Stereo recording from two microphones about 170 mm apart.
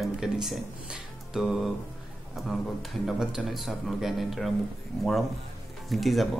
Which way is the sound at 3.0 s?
5° right (ahead or behind).